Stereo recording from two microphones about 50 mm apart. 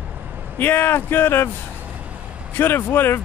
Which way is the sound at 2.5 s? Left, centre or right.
Left.